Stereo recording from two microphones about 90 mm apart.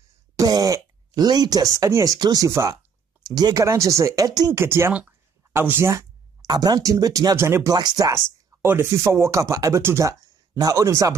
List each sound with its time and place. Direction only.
0.4 s throat clearing: 45° right (ahead or behind)
2.1 s speech: 50° right (ahead or behind)
2.4 s speech: 35° right (ahead or behind)
3.6 s speech: 35° right (ahead or behind)
4.5 s speech: 30° right (ahead or behind)
6.4 s speech: 50° right (ahead or behind)
7.3 s speech: 30° right (ahead or behind)
7.7 s speech: 45° right (ahead or behind)
8.6 s speech: 30° right (ahead or behind)